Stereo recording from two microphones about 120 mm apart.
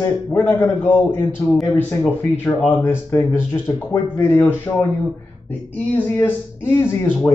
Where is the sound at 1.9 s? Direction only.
15° left (ahead or behind).